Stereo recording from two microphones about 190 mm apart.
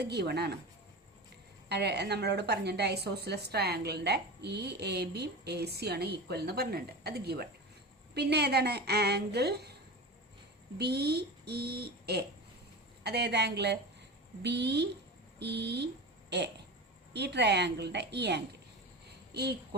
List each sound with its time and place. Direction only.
0.0 s a woman's voice: 60° right (ahead or behind)
1.7 s a woman's voice: 60° right (ahead or behind)
10.8 s a woman's voice: 60° right (ahead or behind)